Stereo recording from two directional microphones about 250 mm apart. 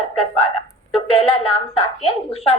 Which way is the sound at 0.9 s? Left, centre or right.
Left.